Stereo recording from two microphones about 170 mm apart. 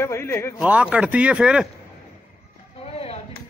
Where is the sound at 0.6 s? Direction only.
5° right (ahead or behind).